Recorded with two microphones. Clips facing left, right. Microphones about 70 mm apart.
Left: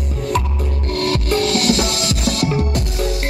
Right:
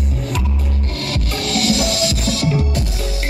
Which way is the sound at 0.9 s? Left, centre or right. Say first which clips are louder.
Left 8 dB; left.